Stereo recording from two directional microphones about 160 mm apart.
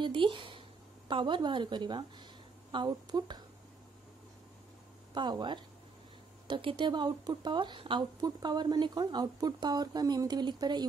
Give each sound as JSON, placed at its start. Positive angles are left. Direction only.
{"t": 0.0, "sound": "a woman's voice", "side_deg": -30}
{"t": 5.1, "sound": "speech", "side_deg": -30}